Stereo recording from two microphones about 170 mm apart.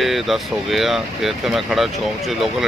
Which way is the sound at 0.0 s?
Centre (ahead or behind).